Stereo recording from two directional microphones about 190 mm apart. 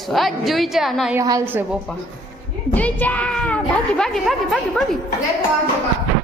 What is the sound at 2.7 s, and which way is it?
A woman's voice, 10° left (ahead or behind).